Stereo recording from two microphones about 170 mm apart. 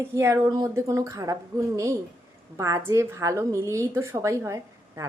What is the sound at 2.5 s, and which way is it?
A woman's voice, 20° right (ahead or behind).